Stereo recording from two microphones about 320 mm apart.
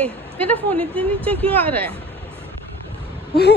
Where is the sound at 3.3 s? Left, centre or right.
Left.